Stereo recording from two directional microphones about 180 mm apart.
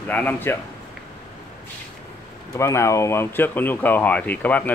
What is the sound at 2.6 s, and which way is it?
Speech, 15° left (ahead or behind).